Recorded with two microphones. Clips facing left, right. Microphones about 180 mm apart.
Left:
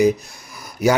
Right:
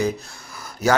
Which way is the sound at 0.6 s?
15° left (ahead or behind).